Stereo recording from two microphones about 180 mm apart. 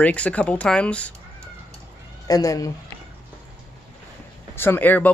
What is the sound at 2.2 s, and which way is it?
Speech, 20° left (ahead or behind).